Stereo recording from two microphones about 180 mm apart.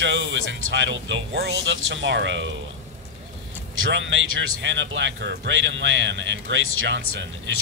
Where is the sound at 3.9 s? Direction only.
90° right.